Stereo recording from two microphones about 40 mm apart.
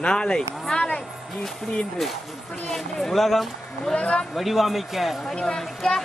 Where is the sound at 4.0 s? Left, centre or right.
Left.